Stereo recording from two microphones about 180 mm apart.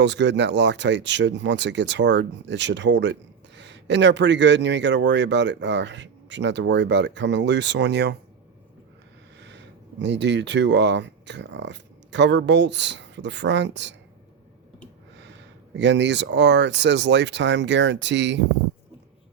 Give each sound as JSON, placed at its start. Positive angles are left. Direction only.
{"t": 0.0, "sound": "speech", "side_deg": -80}
{"t": 10.0, "sound": "speech", "side_deg": -80}
{"t": 15.7, "sound": "speech", "side_deg": -75}